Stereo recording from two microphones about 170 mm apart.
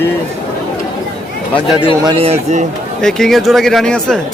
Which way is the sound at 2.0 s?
35° right (ahead or behind).